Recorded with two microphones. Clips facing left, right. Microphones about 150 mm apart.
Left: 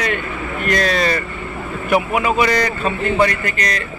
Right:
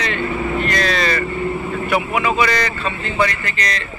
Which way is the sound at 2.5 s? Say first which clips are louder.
Left 3 dB; 45° left (ahead or behind).